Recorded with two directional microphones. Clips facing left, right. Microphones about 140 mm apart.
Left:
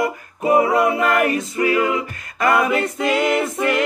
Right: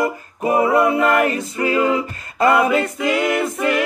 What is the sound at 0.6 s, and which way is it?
A capella, 25° right (ahead or behind).